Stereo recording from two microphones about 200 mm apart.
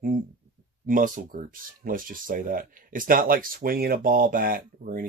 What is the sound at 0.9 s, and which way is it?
Speech, 40° right (ahead or behind).